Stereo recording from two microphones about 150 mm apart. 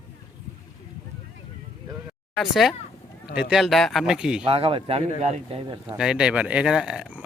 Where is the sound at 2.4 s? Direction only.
Centre (ahead or behind).